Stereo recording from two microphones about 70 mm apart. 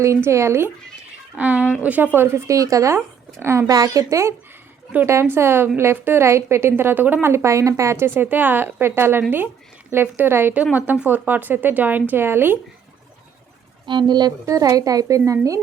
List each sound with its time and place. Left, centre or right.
0.0 s speech: right
1.4 s speech: centre
2.1 s speech: right
2.5 s a woman's voice: right
3.4 s speech: right
3.7 s a woman's voice: right
10.5 s speech: right
13.9 s speech: right
14.4 s a woman's voice: right